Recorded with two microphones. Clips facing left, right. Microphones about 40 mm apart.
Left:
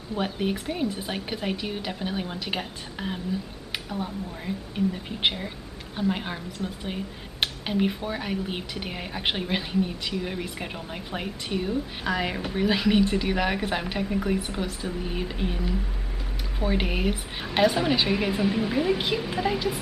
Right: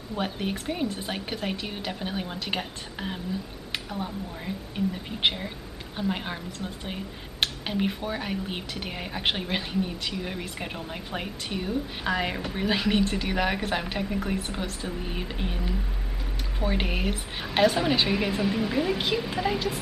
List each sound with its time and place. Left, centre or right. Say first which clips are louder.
0.2 s speech: left 2 dB; centre